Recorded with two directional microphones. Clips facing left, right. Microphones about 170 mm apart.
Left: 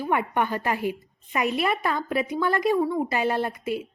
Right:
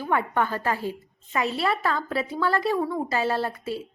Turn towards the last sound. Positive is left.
turn(degrees=15)  # may be behind; listen again after turning